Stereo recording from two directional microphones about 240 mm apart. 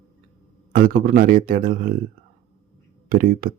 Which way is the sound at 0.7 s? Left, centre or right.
Right.